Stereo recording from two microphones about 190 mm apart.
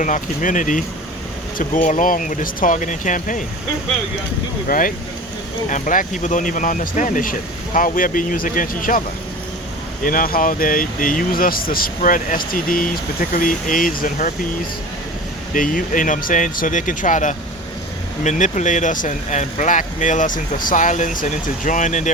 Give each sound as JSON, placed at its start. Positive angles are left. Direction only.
{"t": 0.0, "sound": "speech", "side_deg": 40}
{"t": 4.7, "sound": "speech", "side_deg": 45}
{"t": 10.0, "sound": "speech", "side_deg": 45}
{"t": 15.5, "sound": "speech", "side_deg": 45}